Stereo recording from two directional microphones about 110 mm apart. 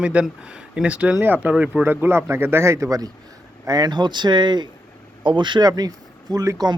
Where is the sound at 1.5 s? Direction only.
5° right (ahead or behind).